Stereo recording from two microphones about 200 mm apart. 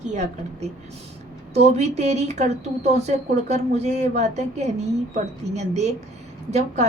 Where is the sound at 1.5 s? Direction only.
35° right (ahead or behind).